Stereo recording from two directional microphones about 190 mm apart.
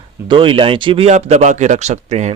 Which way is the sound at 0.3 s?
25° right (ahead or behind).